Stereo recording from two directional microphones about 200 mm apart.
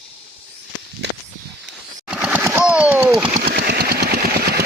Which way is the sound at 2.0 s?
5° right (ahead or behind).